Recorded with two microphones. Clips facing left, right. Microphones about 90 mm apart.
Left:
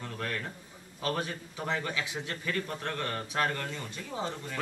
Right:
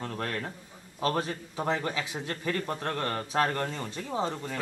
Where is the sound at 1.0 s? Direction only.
35° right (ahead or behind).